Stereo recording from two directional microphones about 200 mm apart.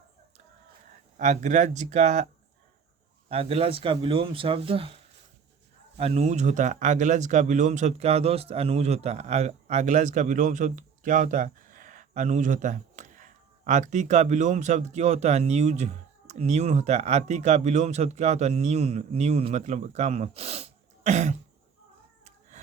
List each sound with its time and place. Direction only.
1.1 s speech: 40° right (ahead or behind)
6.0 s speech: 30° right (ahead or behind)
22.2 s a sound: 35° right (ahead or behind)